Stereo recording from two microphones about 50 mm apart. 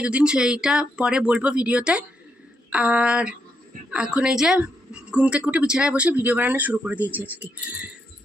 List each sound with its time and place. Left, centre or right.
0.0 s a woman's voice: right
4.6 s a sound: right
5.5 s speech: right